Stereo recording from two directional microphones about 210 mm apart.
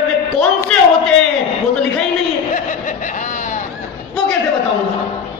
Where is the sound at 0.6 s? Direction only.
5° left (ahead or behind).